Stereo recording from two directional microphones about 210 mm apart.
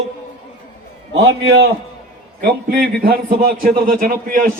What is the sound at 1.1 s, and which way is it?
Speech, 70° right (ahead or behind).